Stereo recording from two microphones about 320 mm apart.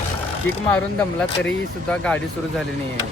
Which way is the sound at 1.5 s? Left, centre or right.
Centre.